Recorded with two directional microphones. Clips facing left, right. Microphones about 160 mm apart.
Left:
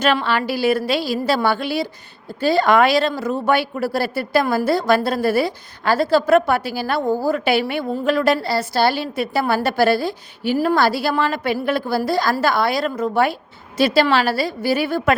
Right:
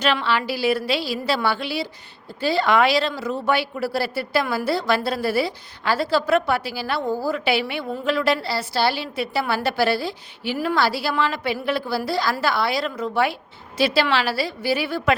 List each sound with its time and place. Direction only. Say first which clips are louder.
0.0 s speech: left 3 dB; 45° left (ahead or behind)